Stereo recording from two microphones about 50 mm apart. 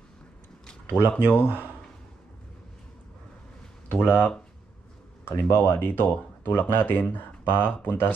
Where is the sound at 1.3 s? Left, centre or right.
Left.